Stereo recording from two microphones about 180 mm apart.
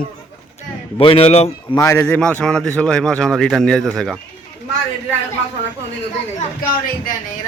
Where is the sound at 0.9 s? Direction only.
30° left (ahead or behind).